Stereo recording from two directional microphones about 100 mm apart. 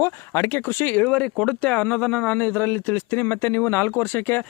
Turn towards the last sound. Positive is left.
turn(degrees=20)  # may be behind; listen again after turning